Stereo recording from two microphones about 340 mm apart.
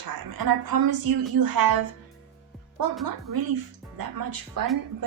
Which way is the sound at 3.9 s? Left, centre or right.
Right.